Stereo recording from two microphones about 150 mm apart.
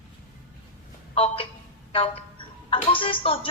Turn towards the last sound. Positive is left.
turn(degrees=35)  # may be behind; listen again after turning